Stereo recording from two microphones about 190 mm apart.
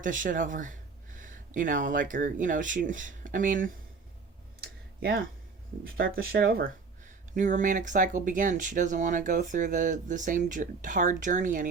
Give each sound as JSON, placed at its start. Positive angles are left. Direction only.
{"t": 0.0, "sound": "speech", "side_deg": -45}
{"t": 4.6, "sound": "a sound", "side_deg": -50}
{"t": 6.0, "sound": "speech", "side_deg": -55}